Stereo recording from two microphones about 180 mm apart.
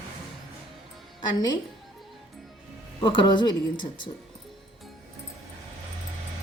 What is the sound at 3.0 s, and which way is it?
Speech, 25° left (ahead or behind).